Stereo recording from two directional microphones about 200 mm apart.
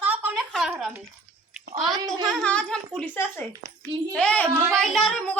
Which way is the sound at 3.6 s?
40° right (ahead or behind).